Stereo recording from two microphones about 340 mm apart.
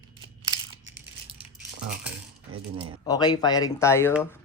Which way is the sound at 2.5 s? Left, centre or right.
Centre.